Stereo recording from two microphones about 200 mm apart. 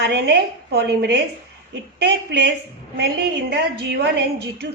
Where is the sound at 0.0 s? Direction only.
55° right (ahead or behind).